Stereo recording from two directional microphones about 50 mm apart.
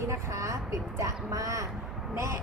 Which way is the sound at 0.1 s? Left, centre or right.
Right.